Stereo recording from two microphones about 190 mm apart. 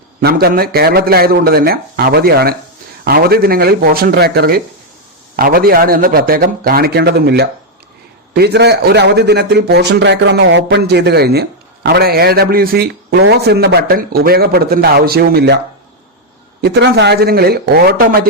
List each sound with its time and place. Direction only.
0.2 s a man's voice: 55° right (ahead or behind)